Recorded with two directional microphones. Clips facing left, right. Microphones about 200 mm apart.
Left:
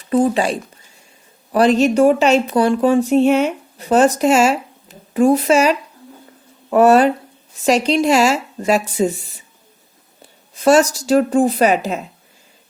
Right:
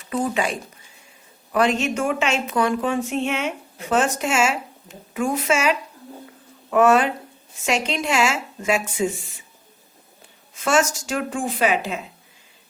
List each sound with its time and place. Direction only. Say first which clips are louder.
0.1 s speech: left 8 dB; 35° left (ahead or behind)
1.5 s speech: left 8 dB; 35° left (ahead or behind)
10.5 s speech: left 8 dB; 35° left (ahead or behind)